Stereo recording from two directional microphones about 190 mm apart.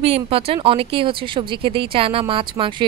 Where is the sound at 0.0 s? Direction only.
30° right (ahead or behind).